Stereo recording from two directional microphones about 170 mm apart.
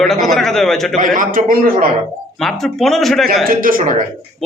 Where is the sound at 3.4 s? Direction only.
55° right (ahead or behind).